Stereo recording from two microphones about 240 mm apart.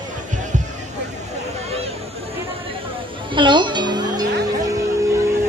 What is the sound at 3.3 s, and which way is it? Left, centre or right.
Music, centre.